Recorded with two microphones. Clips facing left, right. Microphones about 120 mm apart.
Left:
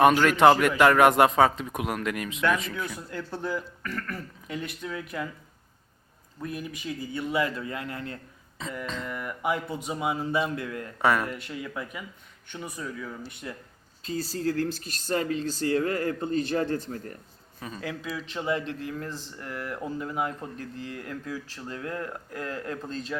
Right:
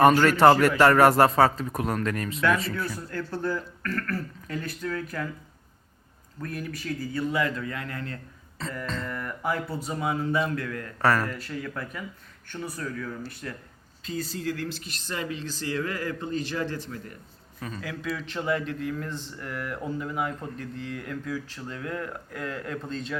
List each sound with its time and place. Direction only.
0.0 s speech: 5° left (ahead or behind)
6.4 s speech: 15° left (ahead or behind)
8.5 s a sound: 10° left (ahead or behind)
8.9 s speech: 5° left (ahead or behind)
14.0 s speech: 30° left (ahead or behind)
16.6 s a man's voice: 45° left (ahead or behind)
17.7 s speech: 25° left (ahead or behind)